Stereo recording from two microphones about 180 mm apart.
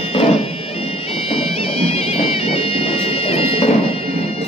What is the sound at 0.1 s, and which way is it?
Music, 35° left (ahead or behind).